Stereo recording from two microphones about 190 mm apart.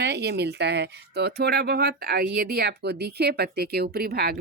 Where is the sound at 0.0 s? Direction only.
60° right (ahead or behind).